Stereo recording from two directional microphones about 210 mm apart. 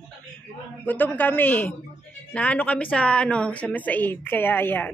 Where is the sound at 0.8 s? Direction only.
10° left (ahead or behind).